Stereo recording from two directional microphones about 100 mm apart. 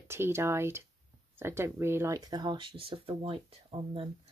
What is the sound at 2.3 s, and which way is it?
Speech, 50° right (ahead or behind).